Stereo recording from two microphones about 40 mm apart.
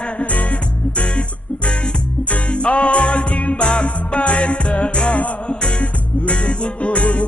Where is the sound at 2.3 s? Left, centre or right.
Left.